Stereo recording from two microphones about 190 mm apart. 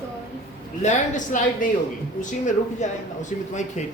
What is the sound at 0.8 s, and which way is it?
Speech, 40° left (ahead or behind).